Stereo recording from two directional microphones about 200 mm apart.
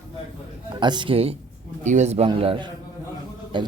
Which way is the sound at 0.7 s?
20° right (ahead or behind).